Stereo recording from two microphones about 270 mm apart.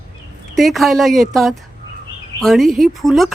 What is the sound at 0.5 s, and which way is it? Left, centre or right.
Speech, centre.